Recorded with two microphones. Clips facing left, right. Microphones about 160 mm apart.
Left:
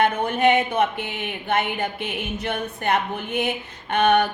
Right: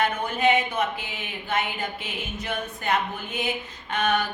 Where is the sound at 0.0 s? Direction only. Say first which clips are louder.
Left 4 dB; 60° left (ahead or behind).